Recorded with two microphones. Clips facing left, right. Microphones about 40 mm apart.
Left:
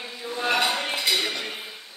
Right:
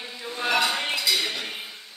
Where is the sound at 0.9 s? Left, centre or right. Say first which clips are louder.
Even; left.